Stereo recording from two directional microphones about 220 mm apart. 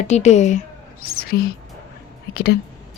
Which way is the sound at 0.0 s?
30° left (ahead or behind).